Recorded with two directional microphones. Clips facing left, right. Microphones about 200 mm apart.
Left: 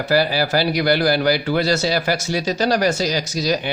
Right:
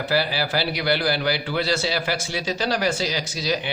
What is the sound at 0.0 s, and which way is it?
A man's voice, 45° left (ahead or behind).